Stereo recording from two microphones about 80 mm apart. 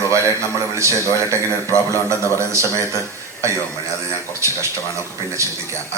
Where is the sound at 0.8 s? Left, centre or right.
Right.